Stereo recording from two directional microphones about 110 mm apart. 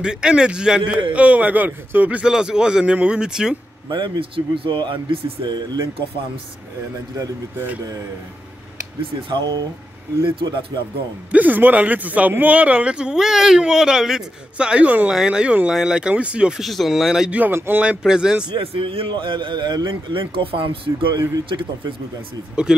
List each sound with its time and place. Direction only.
0.0 s speech: 5° right (ahead or behind)
3.9 s a man's voice: 45° right (ahead or behind)
9.3 s a man's voice: 45° right (ahead or behind)
11.3 s speech: 15° right (ahead or behind)
17.4 s speech: 20° right (ahead or behind)
18.6 s a man's voice: 55° right (ahead or behind)
22.7 s speech: 5° right (ahead or behind)